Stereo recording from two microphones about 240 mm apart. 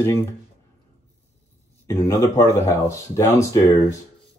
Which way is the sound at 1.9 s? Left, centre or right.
Centre.